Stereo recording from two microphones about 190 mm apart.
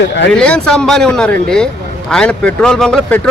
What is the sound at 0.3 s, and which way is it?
A man's voice, 5° left (ahead or behind).